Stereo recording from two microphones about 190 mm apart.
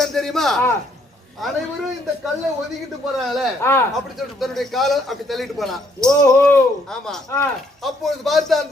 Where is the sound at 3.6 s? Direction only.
15° left (ahead or behind).